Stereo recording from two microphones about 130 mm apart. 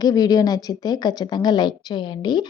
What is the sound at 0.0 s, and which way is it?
A woman's voice, 30° left (ahead or behind).